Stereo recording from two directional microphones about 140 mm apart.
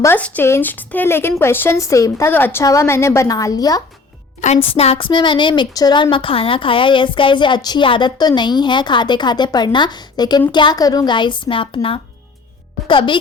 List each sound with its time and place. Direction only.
0.0 s speech: 15° left (ahead or behind)
4.4 s a woman's voice: 55° left (ahead or behind)
4.7 s a woman's voice: 45° left (ahead or behind)